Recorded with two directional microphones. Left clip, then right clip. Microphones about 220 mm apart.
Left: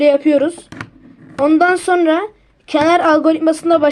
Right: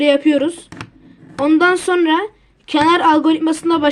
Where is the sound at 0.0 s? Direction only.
20° right (ahead or behind).